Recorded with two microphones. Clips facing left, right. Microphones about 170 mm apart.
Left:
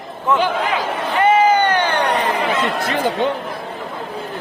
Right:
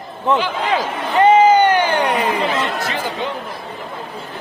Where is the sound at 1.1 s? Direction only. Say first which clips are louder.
Right 3 dB; 20° right (ahead or behind).